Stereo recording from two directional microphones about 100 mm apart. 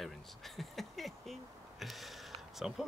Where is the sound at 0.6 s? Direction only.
Centre (ahead or behind).